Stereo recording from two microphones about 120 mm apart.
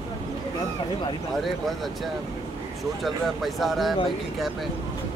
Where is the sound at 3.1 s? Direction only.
Centre (ahead or behind).